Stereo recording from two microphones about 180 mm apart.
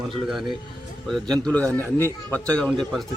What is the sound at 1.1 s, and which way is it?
A man's voice, 5° left (ahead or behind).